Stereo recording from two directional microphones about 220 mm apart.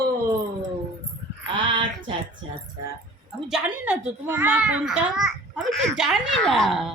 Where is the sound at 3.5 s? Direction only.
5° right (ahead or behind).